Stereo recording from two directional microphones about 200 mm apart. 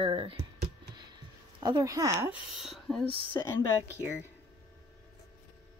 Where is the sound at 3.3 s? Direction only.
10° left (ahead or behind).